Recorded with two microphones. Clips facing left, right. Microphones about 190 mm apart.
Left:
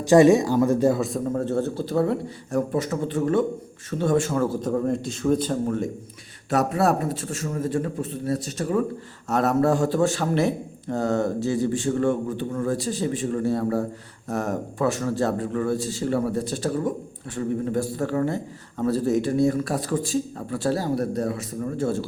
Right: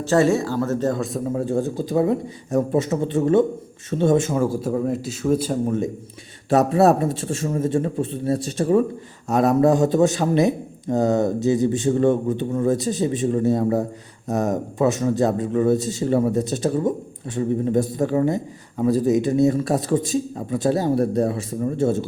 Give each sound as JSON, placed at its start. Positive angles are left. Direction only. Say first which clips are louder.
{"t": 0.0, "sound": "speech", "louder": "left 3 dB", "side_deg": 15}
{"t": 9.3, "sound": "speech", "louder": "right 4 dB", "side_deg": -15}